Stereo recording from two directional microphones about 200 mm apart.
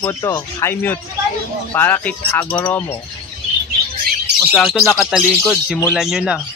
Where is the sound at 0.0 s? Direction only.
15° left (ahead or behind).